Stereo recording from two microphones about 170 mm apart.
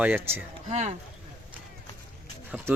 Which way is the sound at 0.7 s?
45° right (ahead or behind).